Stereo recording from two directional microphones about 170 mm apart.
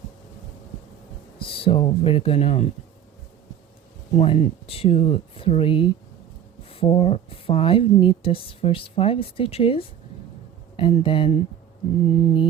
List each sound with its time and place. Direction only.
1.4 s a woman's voice: 30° left (ahead or behind)
4.1 s a woman's voice: 40° left (ahead or behind)